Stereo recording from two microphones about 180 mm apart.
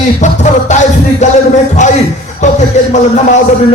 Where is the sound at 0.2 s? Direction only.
40° left (ahead or behind).